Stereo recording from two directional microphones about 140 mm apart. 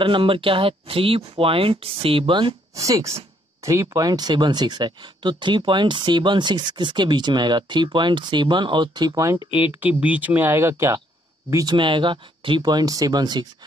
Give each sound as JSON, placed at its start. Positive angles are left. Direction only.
{"t": 0.0, "sound": "speech", "side_deg": -40}
{"t": 2.7, "sound": "speech", "side_deg": -25}
{"t": 9.6, "sound": "speech", "side_deg": -10}
{"t": 11.5, "sound": "speech", "side_deg": -30}